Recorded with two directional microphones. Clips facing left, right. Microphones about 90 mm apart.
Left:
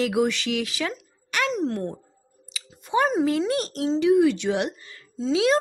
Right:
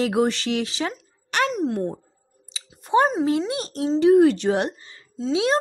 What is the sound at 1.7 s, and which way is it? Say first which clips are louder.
Speech: right 3 dB; 10° right (ahead or behind).